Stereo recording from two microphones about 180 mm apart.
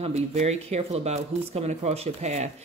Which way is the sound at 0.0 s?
35° right (ahead or behind).